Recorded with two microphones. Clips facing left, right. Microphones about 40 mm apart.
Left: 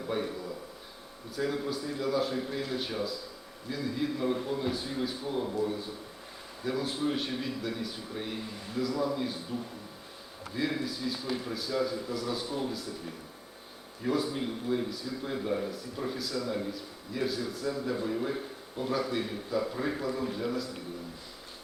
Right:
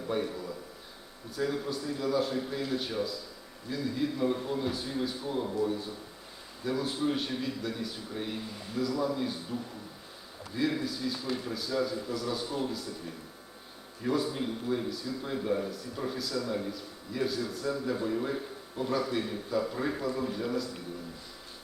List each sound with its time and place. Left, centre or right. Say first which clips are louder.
0.1 s speech: right 1 dB; centre
1.4 s speech: even; centre
14.0 s speech: even; centre